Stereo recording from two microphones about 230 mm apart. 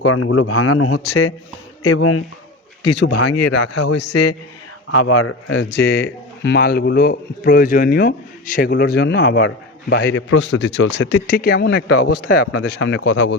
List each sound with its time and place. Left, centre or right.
0.0 s a man's voice: left
2.9 s a man's voice: left
3.2 s speech: left
4.9 s a man's voice: left
5.7 s a man's voice: left
12.6 s a man's voice: left